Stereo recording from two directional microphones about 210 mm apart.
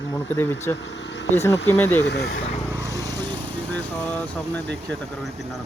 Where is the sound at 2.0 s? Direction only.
55° left (ahead or behind).